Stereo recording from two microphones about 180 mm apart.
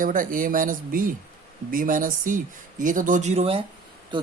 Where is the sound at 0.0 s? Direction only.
50° right (ahead or behind).